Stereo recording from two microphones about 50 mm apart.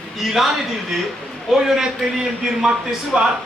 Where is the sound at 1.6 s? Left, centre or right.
Centre.